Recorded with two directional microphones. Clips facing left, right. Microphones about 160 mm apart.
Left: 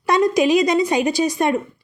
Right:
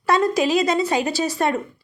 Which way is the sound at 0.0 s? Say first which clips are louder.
Left 2 dB; 15° left (ahead or behind).